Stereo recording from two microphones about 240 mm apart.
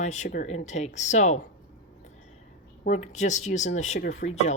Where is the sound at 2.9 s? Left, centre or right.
Left.